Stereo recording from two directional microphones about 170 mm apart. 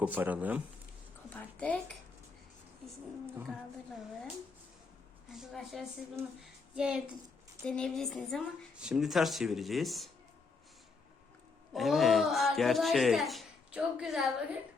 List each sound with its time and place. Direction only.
0.0 s speech: 10° right (ahead or behind)
1.3 s a sound: 10° left (ahead or behind)
5.3 s speech: centre (ahead or behind)
6.4 s a sound: 5° right (ahead or behind)
7.6 s speech: 5° left (ahead or behind)
11.7 s speech: centre (ahead or behind)